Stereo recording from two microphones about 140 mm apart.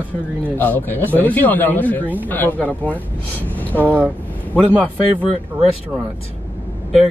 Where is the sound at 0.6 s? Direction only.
15° left (ahead or behind).